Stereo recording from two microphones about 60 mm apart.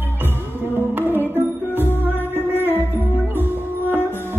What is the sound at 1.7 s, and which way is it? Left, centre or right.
Music, left.